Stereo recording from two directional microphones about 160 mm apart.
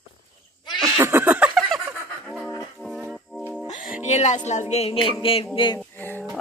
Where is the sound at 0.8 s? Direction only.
15° right (ahead or behind).